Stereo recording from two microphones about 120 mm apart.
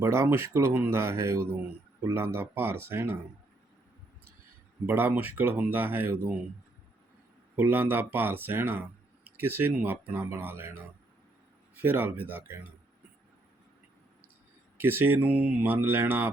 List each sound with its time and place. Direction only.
0.0 s speech: 20° right (ahead or behind)
4.9 s speech: 15° right (ahead or behind)
7.5 s speech: 15° right (ahead or behind)
11.8 s speech: 15° right (ahead or behind)
14.8 s speech: 15° right (ahead or behind)